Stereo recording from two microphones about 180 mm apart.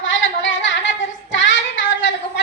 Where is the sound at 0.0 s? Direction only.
90° left.